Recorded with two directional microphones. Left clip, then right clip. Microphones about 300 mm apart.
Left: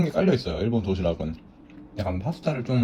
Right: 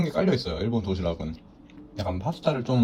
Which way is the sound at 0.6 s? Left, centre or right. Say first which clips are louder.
Left 2 dB; centre.